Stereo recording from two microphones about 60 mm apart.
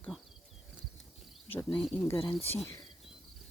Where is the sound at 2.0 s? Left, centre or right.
Left.